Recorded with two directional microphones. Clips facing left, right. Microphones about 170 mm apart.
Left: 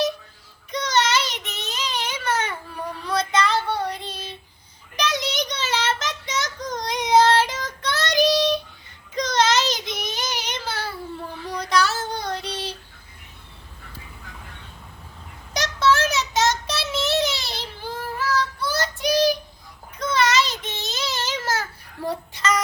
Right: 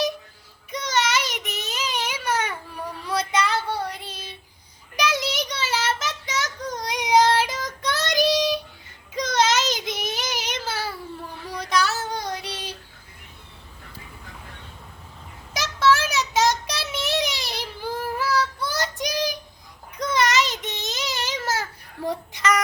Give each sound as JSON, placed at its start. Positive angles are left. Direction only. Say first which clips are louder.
{"t": 0.7, "sound": "child singing", "louder": "left 2 dB", "side_deg": -10}
{"t": 15.5, "sound": "child singing", "louder": "even", "side_deg": -10}